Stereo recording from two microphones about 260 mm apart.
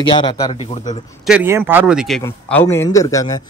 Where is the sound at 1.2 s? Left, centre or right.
Centre.